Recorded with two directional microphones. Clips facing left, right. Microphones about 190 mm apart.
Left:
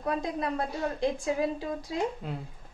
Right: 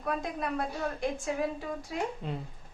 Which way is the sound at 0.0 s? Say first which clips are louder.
Left 3 dB; 30° left (ahead or behind).